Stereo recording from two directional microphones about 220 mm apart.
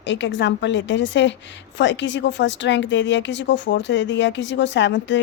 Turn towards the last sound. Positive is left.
turn(degrees=55)  # may be behind; listen again after turning